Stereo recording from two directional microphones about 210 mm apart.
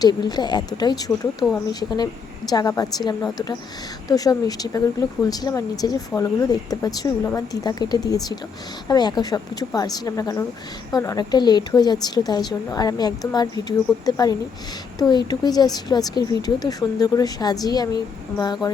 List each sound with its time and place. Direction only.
0.0 s a woman's voice: 20° left (ahead or behind)
2.5 s a woman's voice: 15° left (ahead or behind)